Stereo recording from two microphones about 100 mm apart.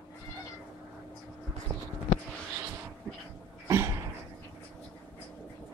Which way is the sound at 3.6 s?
30° right (ahead or behind).